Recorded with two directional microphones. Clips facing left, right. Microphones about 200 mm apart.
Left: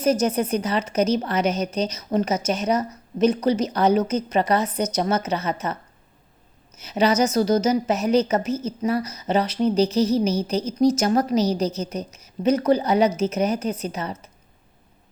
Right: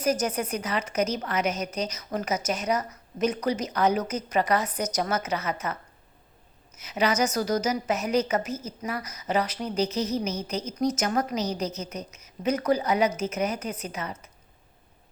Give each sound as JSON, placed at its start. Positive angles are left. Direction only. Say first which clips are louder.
{"t": 0.0, "sound": "a woman's voice", "louder": "left 6 dB", "side_deg": 25}
{"t": 6.7, "sound": "a woman's voice", "louder": "left 5 dB", "side_deg": 30}